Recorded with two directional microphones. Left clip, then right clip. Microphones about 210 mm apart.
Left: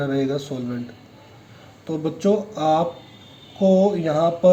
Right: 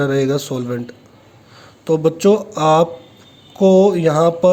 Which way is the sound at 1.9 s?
50° right (ahead or behind).